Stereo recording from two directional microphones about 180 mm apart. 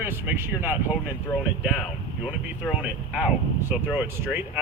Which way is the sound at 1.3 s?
15° left (ahead or behind).